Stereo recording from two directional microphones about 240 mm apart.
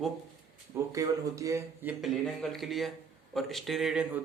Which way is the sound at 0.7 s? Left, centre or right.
Centre.